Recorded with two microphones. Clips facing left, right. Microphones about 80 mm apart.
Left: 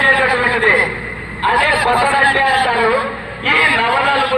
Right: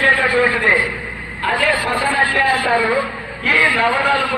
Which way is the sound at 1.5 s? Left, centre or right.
Left.